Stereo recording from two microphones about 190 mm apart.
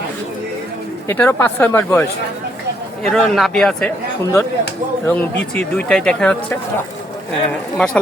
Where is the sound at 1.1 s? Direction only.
10° left (ahead or behind).